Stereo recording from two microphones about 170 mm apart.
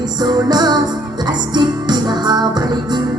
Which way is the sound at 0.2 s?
25° right (ahead or behind).